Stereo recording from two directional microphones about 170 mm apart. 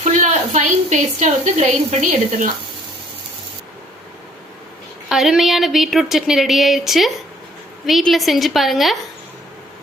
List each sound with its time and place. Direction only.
0.0 s a woman's voice: 50° right (ahead or behind)
5.0 s speech: 5° right (ahead or behind)